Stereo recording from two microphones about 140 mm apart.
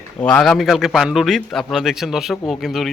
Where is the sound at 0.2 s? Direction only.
5° left (ahead or behind).